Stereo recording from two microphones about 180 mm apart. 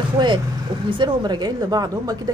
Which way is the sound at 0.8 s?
25° right (ahead or behind).